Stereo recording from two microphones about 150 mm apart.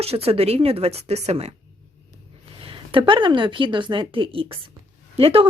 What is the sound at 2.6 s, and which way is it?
Speech, 35° right (ahead or behind).